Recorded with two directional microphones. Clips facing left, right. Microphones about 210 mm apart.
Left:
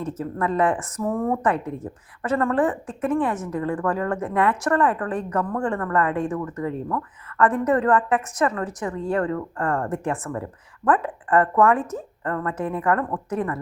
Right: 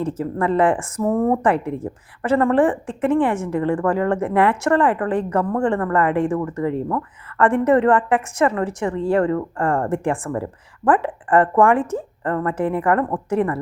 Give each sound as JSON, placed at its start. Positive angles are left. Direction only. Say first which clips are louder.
{"t": 0.0, "sound": "a woman's voice", "louder": "right 4 dB", "side_deg": -30}